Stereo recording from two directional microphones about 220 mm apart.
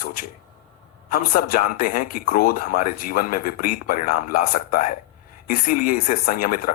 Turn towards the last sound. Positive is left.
turn(degrees=40)  # may be behind; listen again after turning